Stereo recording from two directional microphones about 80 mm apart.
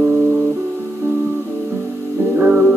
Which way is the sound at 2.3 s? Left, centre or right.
Right.